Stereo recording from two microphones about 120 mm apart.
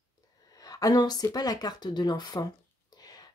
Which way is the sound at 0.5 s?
30° left (ahead or behind).